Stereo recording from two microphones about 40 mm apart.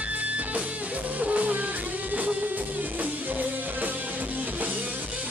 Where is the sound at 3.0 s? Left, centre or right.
Right.